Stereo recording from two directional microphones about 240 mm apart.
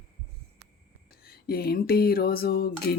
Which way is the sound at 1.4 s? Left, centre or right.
Left.